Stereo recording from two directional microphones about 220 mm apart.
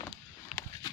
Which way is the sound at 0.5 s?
Centre (ahead or behind).